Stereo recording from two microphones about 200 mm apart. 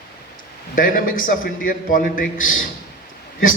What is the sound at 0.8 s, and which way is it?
A man's voice, 45° left (ahead or behind).